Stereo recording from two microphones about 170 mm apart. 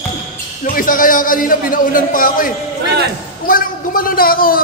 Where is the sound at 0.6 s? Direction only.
55° left (ahead or behind).